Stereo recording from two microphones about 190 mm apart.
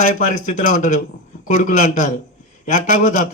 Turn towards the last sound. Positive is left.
turn(degrees=40)  # may be behind; listen again after turning